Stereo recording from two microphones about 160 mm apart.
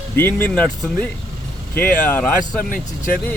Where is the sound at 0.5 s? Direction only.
5° left (ahead or behind).